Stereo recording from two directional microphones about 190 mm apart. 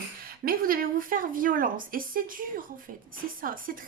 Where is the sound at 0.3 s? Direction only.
50° right (ahead or behind).